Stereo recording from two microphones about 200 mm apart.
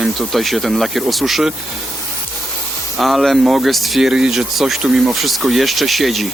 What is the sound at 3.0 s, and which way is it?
Speech, centre (ahead or behind).